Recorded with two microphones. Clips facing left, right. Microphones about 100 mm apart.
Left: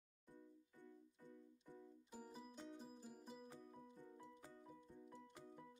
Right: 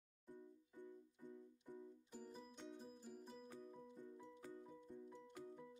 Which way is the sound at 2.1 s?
10° left (ahead or behind).